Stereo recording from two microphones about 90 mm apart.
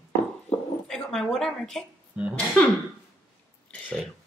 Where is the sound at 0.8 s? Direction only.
5° left (ahead or behind).